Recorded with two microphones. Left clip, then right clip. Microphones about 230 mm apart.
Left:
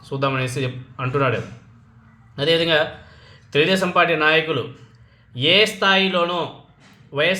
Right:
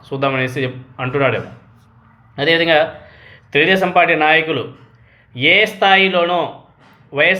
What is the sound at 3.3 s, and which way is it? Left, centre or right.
Speech, centre.